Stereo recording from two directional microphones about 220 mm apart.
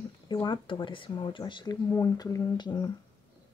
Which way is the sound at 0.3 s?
20° left (ahead or behind).